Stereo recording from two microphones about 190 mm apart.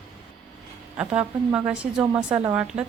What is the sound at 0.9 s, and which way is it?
A woman's voice, 5° right (ahead or behind).